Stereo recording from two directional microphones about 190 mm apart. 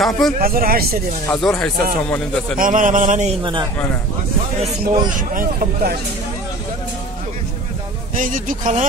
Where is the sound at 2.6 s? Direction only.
45° right (ahead or behind).